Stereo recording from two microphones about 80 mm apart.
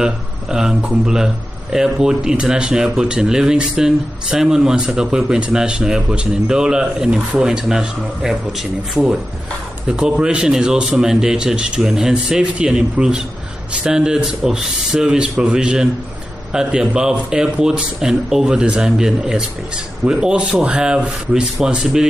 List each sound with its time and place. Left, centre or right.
0.0 s a man's voice: centre